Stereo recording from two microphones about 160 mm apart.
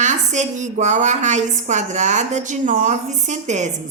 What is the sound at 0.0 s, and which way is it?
A woman's voice, 50° right (ahead or behind).